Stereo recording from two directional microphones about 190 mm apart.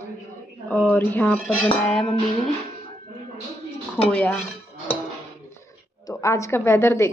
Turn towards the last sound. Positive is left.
turn(degrees=15)  # may be behind; listen again after turning